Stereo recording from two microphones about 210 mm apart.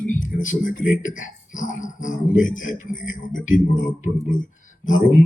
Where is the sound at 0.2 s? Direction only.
40° left (ahead or behind).